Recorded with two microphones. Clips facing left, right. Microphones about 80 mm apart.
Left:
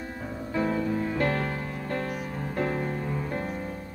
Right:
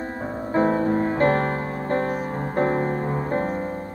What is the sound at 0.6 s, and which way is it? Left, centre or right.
Music, right.